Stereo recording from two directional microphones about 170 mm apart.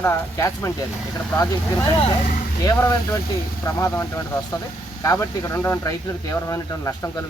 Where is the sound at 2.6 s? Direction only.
20° left (ahead or behind).